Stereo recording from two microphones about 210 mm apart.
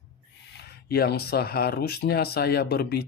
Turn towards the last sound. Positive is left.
turn(degrees=50)  # may be behind; listen again after turning